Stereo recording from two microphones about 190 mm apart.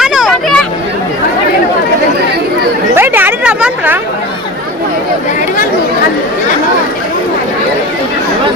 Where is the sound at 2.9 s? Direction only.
10° right (ahead or behind).